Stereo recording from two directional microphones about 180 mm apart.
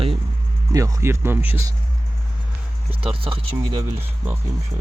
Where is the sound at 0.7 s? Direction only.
15° right (ahead or behind).